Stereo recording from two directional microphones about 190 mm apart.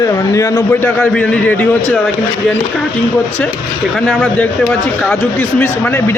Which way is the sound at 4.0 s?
5° left (ahead or behind).